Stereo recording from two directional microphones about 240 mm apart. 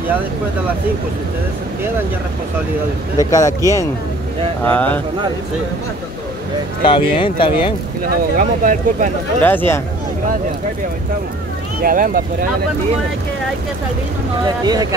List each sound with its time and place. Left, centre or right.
3.2 s speech: centre
6.8 s speech: centre
8.4 s speech: right
9.4 s speech: centre
11.8 s speech: right
14.6 s speech: centre